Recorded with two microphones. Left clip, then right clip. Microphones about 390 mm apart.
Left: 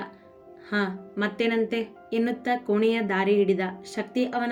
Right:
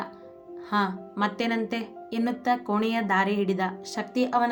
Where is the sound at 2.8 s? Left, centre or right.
Centre.